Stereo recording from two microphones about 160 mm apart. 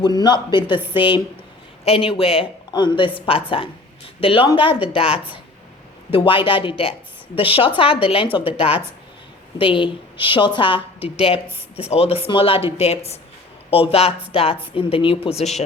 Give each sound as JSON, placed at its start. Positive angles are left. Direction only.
{"t": 0.0, "sound": "a woman's voice", "side_deg": 25}